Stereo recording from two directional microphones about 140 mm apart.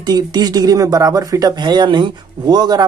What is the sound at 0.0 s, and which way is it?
Speech, 30° right (ahead or behind).